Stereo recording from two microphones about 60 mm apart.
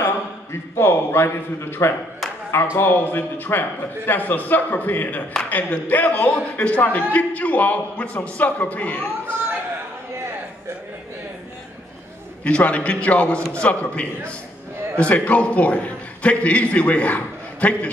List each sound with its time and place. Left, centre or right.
0.0 s a man's voice: left
12.4 s a man's voice: left